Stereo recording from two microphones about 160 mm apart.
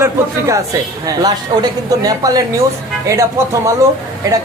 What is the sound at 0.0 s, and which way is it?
A man's voice, 20° right (ahead or behind).